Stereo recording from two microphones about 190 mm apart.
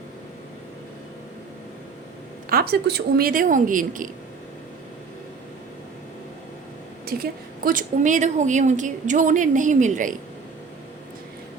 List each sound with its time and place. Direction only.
2.5 s speech: 55° right (ahead or behind)
7.0 s a woman's voice: 50° right (ahead or behind)